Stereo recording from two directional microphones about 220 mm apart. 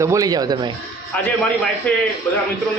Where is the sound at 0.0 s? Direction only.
15° right (ahead or behind).